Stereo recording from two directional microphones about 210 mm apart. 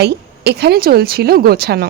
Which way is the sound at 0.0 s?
50° right (ahead or behind).